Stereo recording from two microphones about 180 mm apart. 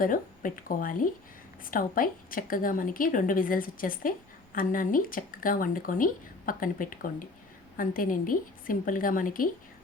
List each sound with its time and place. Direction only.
0.0 s speech: 50° left (ahead or behind)